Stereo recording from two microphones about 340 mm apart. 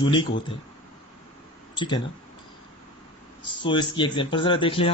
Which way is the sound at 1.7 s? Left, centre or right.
Centre.